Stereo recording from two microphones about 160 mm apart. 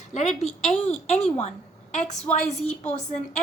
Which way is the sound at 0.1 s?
45° left (ahead or behind).